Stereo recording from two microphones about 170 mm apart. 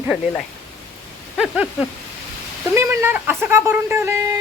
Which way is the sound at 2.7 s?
10° right (ahead or behind).